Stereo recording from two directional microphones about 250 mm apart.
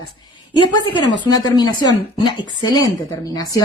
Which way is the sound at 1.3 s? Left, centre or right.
Centre.